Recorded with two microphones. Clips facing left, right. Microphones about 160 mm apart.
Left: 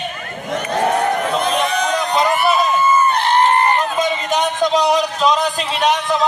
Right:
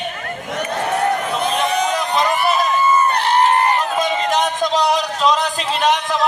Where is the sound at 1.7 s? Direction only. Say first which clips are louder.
Left 1 dB; 5° right (ahead or behind).